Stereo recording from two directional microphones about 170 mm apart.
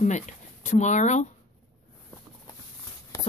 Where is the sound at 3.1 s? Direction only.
20° left (ahead or behind).